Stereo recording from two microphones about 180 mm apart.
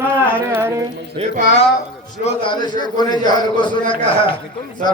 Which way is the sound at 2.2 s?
25° left (ahead or behind).